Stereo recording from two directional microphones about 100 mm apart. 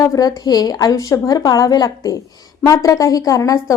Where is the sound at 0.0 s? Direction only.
35° left (ahead or behind).